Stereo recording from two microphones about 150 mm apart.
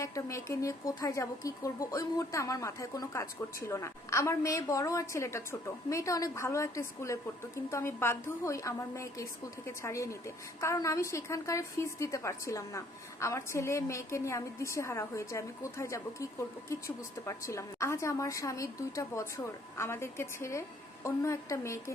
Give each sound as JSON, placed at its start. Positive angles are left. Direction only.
{"t": 0.0, "sound": "speech", "side_deg": 20}